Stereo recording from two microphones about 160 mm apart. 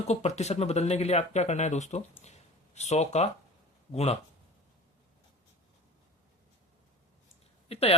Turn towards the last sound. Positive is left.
turn(degrees=40)  # may be behind; listen again after turning